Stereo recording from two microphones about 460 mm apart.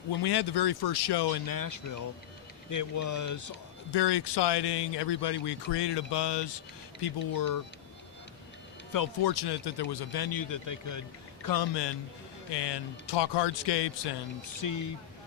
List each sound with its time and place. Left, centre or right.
0.2 s speech: left
3.9 s speech: left
7.0 s speech: left
8.9 s speech: left
11.4 s speech: left
14.6 s speech: left